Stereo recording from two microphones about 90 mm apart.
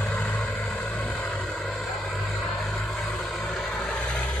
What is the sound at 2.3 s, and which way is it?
Vehicle, 15° left (ahead or behind).